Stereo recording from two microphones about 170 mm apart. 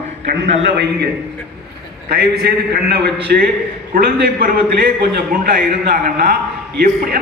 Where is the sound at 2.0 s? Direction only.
70° right (ahead or behind).